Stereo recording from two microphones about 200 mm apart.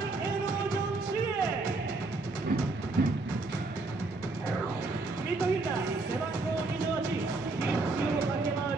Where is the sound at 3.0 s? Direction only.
55° right (ahead or behind).